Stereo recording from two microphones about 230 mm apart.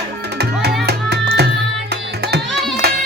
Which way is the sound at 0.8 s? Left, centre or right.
Right.